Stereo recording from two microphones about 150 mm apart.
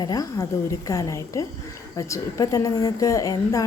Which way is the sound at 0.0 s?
25° left (ahead or behind).